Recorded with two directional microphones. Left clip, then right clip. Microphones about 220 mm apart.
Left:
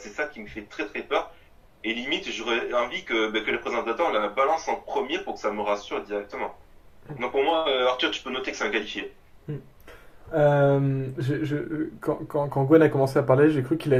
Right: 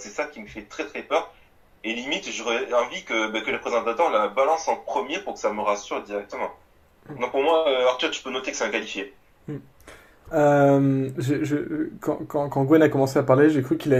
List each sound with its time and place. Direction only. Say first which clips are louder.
0.0 s speech: right 1 dB; 20° right (ahead or behind)
10.3 s speech: right 3 dB; 40° right (ahead or behind)